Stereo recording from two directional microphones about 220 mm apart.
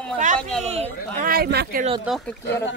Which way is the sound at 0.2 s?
35° right (ahead or behind).